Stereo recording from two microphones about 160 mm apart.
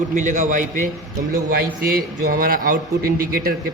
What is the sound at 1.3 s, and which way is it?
A man's voice, 75° right (ahead or behind).